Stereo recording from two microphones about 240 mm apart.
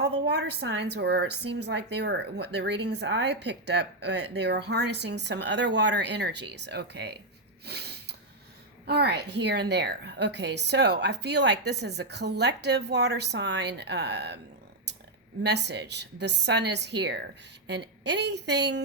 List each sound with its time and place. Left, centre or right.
0.3 s a woman's voice: right
7.6 s snort: right
8.9 s a woman's voice: right
15.4 s a woman's voice: right